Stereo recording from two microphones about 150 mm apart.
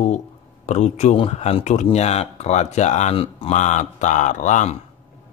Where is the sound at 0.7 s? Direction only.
50° left (ahead or behind).